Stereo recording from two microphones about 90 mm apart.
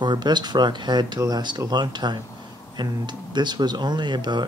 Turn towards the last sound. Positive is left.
turn(degrees=-55)  # may be behind; listen again after turning